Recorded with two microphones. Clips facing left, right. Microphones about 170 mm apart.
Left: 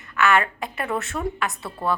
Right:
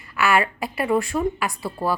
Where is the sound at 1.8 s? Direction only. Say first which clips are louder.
Right 1 dB; 30° right (ahead or behind).